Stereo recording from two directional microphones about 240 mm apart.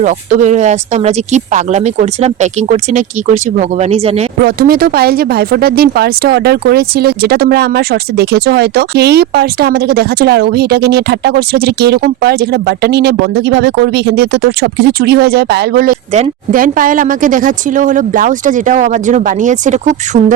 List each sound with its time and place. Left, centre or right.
0.0 s speech: right
4.4 s speech: right